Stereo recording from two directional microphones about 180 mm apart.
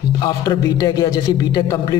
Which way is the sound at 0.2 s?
20° left (ahead or behind).